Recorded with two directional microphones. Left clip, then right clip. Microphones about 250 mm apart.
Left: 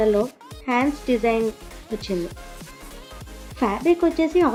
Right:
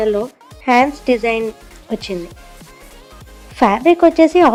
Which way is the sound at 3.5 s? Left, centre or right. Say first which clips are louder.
Right 9 dB; right.